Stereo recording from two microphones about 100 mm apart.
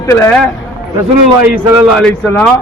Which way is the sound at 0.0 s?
30° left (ahead or behind).